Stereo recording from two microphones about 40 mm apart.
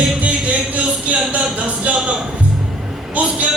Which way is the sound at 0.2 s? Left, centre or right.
Right.